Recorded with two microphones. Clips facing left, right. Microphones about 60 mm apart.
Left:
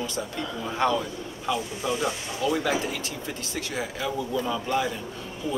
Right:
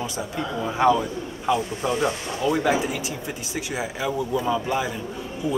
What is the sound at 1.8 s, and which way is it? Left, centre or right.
Speech, right.